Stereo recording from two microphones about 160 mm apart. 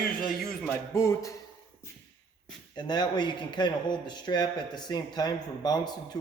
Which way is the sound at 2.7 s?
25° left (ahead or behind).